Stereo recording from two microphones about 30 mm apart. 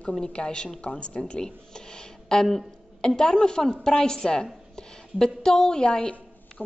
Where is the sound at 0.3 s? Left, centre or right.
Left.